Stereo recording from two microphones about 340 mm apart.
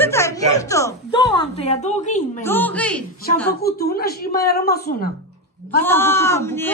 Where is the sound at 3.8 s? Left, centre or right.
Left.